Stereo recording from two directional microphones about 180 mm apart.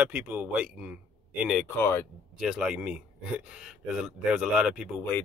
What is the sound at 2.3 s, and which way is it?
Speech, 5° right (ahead or behind).